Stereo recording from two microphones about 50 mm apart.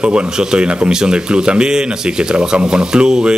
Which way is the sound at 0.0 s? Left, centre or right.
Right.